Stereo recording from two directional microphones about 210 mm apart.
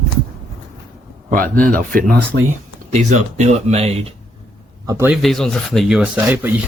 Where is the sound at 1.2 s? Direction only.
40° right (ahead or behind).